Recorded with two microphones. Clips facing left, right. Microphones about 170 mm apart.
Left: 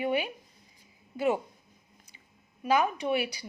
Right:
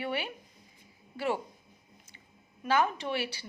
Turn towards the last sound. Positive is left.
turn(degrees=15)  # may be behind; listen again after turning